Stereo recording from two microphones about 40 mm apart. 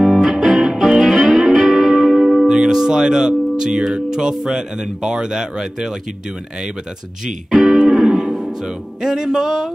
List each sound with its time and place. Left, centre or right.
0.0 s music: centre
4.5 s speech: centre
7.9 s music: centre
8.6 s speech: centre